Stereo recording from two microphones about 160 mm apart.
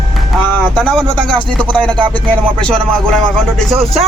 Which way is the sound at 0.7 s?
5° left (ahead or behind).